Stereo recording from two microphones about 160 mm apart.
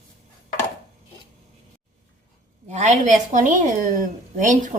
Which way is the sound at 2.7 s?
45° right (ahead or behind).